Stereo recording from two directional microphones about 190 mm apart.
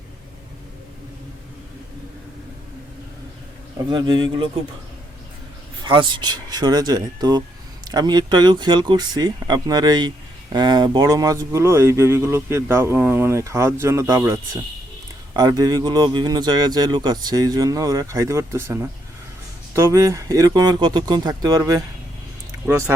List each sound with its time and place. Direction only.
3.8 s speech: 25° right (ahead or behind)
5.8 s speech: 25° right (ahead or behind)